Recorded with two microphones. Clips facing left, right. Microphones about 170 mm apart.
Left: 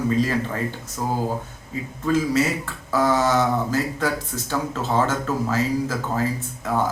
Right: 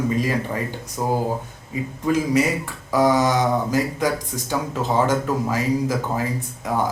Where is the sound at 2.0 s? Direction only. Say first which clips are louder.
Right 1 dB; 15° right (ahead or behind).